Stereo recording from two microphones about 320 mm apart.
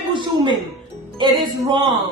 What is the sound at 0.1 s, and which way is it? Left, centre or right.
Music, centre.